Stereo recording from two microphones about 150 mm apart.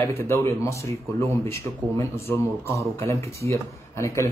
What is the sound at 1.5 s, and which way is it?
Speech, 20° left (ahead or behind).